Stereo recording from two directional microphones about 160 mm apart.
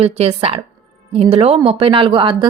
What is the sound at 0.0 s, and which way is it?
A woman's voice, 40° right (ahead or behind).